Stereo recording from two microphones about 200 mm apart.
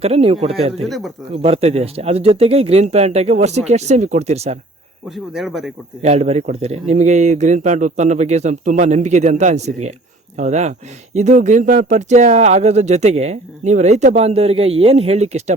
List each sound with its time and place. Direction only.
0.0 s speech: 30° right (ahead or behind)
0.8 s speech: centre (ahead or behind)
1.4 s speech: 30° right (ahead or behind)
5.1 s speech: centre (ahead or behind)
6.0 s speech: 35° right (ahead or behind)